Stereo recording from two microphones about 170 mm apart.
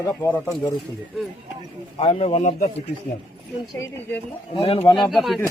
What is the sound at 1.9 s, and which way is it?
Speech, 35° left (ahead or behind).